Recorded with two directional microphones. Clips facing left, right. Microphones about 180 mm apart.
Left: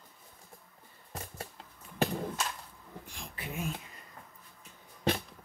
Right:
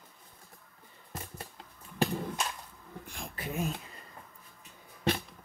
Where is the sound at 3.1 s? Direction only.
40° right (ahead or behind).